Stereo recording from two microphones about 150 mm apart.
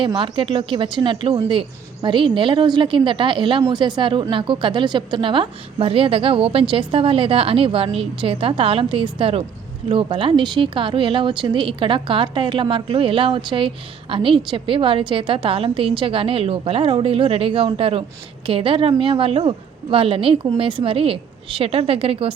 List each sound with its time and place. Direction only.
0.0 s speech: 35° right (ahead or behind)